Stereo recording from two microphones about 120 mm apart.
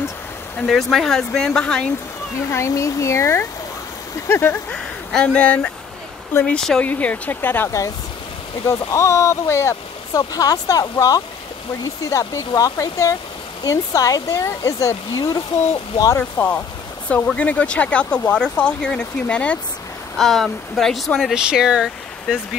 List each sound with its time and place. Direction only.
0.6 s speech: centre (ahead or behind)
2.5 s speech: 25° left (ahead or behind)
16.2 s speech: 15° left (ahead or behind); by 22.4 s 5° right (ahead or behind)